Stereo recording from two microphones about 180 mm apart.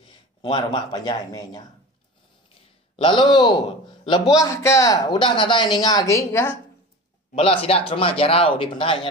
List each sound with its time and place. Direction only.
0.4 s a man's voice: 25° left (ahead or behind)
3.0 s a man's voice: 25° left (ahead or behind)
7.3 s speech: 30° left (ahead or behind)